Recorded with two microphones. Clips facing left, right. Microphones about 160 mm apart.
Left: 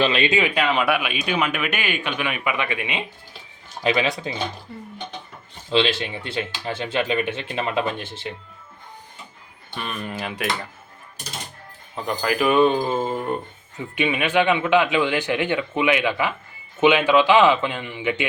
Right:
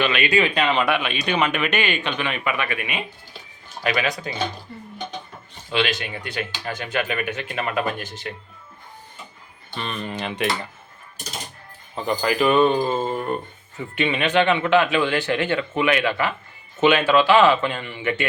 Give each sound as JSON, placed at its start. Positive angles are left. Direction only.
{"t": 0.0, "sound": "speech", "side_deg": 30}
{"t": 0.3, "sound": "speech", "side_deg": 15}
{"t": 5.7, "sound": "speech", "side_deg": 25}
{"t": 9.7, "sound": "speech", "side_deg": 5}
{"t": 11.9, "sound": "speech", "side_deg": 0}